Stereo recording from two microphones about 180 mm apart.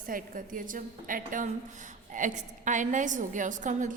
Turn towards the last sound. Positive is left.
turn(degrees=-45)  # may be behind; listen again after turning